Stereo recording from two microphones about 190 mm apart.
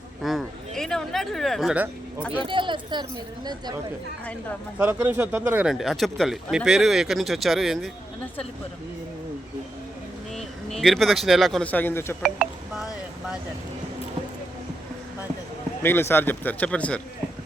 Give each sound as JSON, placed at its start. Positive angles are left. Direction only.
{"t": 0.2, "sound": "a sound", "side_deg": 0}
{"t": 0.8, "sound": "speech", "side_deg": 5}
{"t": 2.4, "sound": "speech", "side_deg": -25}
{"t": 4.8, "sound": "speech", "side_deg": -10}
{"t": 10.3, "sound": "speech", "side_deg": 0}
{"t": 12.2, "sound": "a sound", "side_deg": -5}
{"t": 15.8, "sound": "a man's voice", "side_deg": 10}